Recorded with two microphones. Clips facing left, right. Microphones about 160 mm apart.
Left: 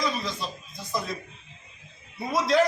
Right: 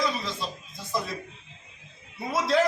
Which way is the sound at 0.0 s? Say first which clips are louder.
Even; centre (ahead or behind).